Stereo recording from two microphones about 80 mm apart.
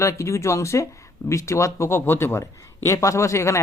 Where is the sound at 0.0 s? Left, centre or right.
Left.